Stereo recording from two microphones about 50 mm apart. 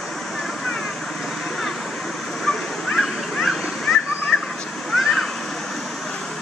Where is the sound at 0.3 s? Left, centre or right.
Centre.